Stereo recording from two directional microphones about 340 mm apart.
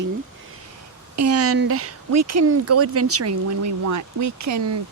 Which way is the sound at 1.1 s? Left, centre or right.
Right.